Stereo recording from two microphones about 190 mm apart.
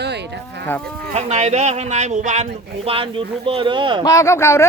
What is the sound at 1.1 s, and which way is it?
Speech, 35° right (ahead or behind).